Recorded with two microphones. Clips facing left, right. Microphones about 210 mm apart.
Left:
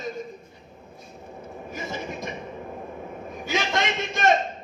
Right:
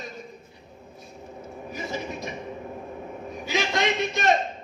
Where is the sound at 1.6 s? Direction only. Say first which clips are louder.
Right 1 dB; 50° left (ahead or behind).